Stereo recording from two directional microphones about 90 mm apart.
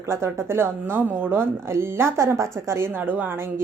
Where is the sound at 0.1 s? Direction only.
30° right (ahead or behind).